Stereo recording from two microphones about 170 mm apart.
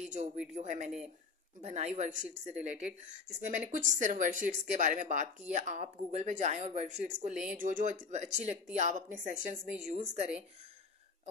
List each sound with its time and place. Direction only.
0.6 s speech: 45° right (ahead or behind)